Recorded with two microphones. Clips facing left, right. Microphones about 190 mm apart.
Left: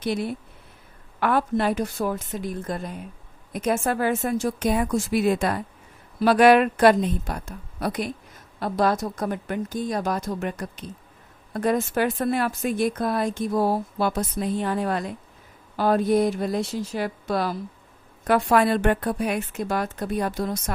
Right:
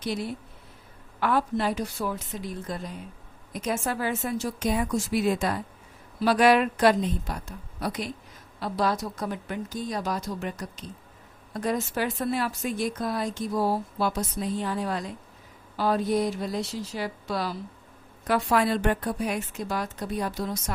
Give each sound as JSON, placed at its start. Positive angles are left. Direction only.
{"t": 0.0, "sound": "a woman's voice", "side_deg": 60}